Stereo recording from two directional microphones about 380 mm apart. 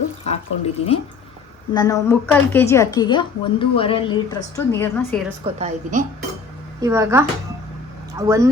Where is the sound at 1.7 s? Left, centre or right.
Centre.